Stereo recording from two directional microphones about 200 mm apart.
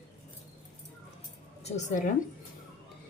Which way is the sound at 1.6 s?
35° left (ahead or behind).